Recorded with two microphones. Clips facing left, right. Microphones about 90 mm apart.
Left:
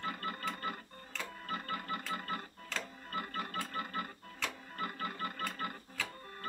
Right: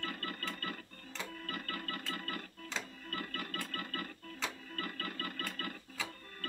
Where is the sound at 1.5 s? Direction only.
20° left (ahead or behind).